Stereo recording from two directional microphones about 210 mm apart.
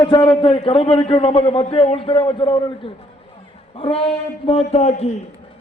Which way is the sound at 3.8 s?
30° left (ahead or behind).